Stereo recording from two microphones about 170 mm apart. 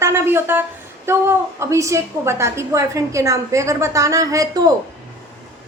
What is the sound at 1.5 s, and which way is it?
A woman's voice, 15° right (ahead or behind).